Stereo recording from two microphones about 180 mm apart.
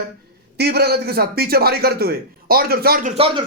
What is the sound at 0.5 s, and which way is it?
A man's voice, 65° right (ahead or behind).